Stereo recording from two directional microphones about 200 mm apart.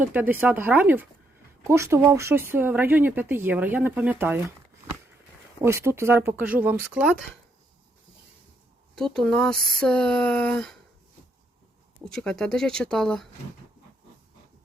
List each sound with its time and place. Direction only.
0.0 s speech: 10° right (ahead or behind)
5.6 s speech: 15° right (ahead or behind)
9.0 s speech: centre (ahead or behind)
12.0 s speech: 5° left (ahead or behind)